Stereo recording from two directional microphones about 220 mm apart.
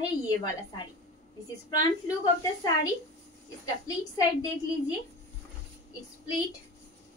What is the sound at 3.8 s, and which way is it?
Speech, 15° left (ahead or behind).